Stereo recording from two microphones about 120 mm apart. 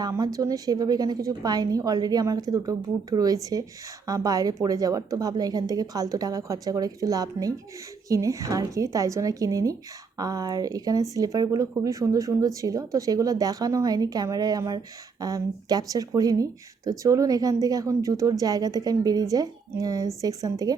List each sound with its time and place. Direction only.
0.0 s a woman's voice: 30° right (ahead or behind)